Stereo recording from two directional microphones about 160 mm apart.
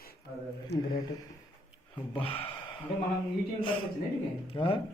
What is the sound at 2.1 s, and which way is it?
Speech, 35° left (ahead or behind).